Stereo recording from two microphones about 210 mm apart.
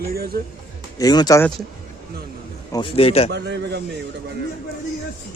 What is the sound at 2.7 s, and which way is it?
Speech, 25° left (ahead or behind).